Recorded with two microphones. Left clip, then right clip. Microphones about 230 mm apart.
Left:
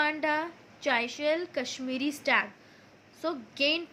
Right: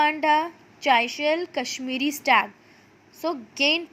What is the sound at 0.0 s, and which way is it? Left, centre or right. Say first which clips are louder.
A woman's voice: right 8 dB; centre.